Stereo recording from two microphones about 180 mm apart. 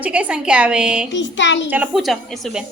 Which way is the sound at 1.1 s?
85° left.